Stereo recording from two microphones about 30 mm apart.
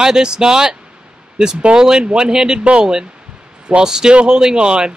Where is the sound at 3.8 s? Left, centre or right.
Right.